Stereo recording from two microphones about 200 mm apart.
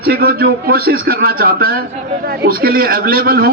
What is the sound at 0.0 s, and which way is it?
A man's voice, 50° right (ahead or behind).